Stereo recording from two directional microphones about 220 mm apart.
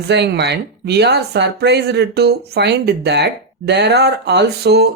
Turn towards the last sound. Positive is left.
turn(degrees=-45)  # may be behind; listen again after turning